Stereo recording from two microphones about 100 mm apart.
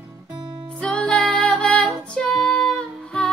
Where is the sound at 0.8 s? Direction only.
10° left (ahead or behind).